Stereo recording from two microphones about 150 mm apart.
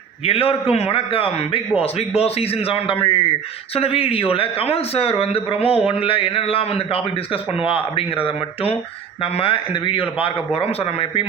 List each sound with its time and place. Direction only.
0.3 s a man's voice: 40° left (ahead or behind)